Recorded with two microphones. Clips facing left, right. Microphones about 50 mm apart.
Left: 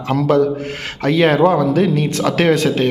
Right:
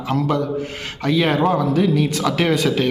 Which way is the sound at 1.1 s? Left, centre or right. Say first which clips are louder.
Left 4 dB; left.